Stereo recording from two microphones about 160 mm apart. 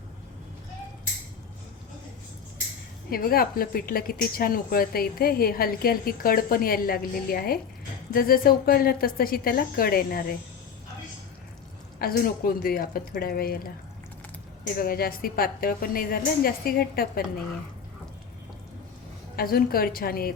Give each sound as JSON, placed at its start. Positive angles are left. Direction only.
{"t": 3.1, "sound": "a woman's voice", "side_deg": 70}
{"t": 11.9, "sound": "a woman's voice", "side_deg": 70}
{"t": 14.8, "sound": "a woman's voice", "side_deg": 65}
{"t": 19.4, "sound": "a woman's voice", "side_deg": 70}